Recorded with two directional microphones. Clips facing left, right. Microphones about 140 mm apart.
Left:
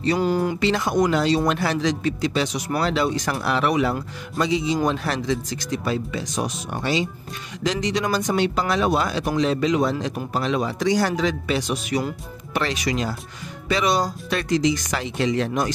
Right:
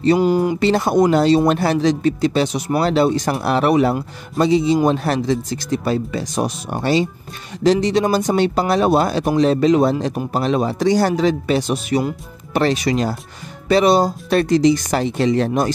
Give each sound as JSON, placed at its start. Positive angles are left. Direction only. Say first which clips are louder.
{"t": 0.2, "sound": "speech", "louder": "right 5 dB", "side_deg": -15}
{"t": 0.6, "sound": "a man's voice", "louder": "right 5 dB", "side_deg": -35}
{"t": 7.6, "sound": "a man's voice", "louder": "right 8 dB", "side_deg": -30}